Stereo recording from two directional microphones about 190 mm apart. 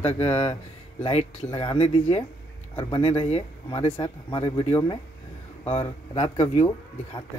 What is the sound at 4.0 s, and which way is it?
Speech, 20° left (ahead or behind).